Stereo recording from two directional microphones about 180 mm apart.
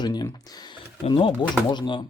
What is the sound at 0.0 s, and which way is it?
Computer keyboard, 25° left (ahead or behind).